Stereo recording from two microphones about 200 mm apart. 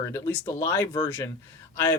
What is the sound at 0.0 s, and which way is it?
Speech, 15° left (ahead or behind).